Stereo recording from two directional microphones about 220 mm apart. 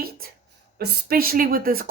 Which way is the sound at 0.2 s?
40° right (ahead or behind).